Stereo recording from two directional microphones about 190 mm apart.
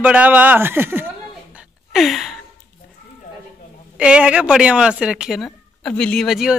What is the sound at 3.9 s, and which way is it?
Speech, 5° right (ahead or behind).